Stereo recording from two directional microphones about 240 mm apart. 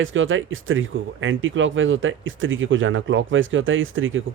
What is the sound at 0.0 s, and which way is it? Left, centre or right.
Speech, right.